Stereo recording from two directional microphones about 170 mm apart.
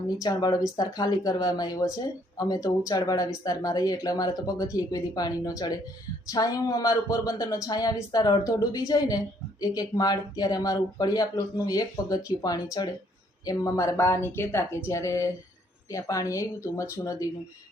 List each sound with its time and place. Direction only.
0.2 s a woman's voice: 25° left (ahead or behind)